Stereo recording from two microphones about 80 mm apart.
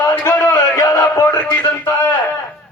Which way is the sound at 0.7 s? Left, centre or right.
Left.